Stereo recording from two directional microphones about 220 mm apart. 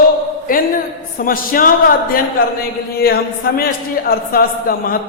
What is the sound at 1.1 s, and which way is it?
Speech, 40° left (ahead or behind).